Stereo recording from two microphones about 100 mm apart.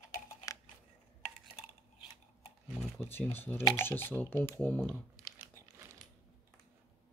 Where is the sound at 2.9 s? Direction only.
20° left (ahead or behind).